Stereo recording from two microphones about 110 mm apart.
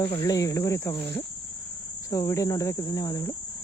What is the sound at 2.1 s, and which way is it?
Speech, 30° left (ahead or behind).